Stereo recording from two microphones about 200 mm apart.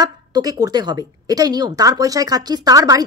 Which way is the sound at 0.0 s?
20° right (ahead or behind).